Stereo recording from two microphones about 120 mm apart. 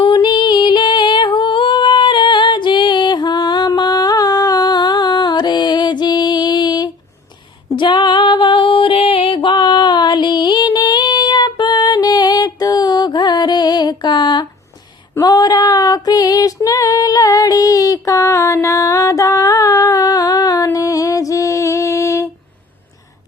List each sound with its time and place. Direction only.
0.0 s female singing: 40° left (ahead or behind)
7.8 s music: 40° left (ahead or behind)
15.1 s female singing: 30° left (ahead or behind)